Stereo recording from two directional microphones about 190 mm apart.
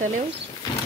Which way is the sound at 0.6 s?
20° left (ahead or behind).